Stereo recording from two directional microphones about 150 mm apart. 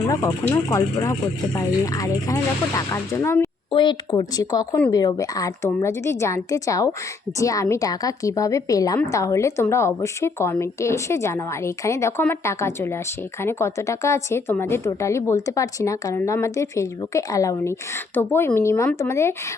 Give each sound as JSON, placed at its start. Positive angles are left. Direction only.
{"t": 0.1, "sound": "a woman's voice", "side_deg": 20}
{"t": 3.7, "sound": "a woman's voice", "side_deg": 30}